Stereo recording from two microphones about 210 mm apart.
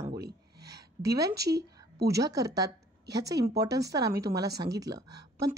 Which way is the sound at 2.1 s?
15° right (ahead or behind).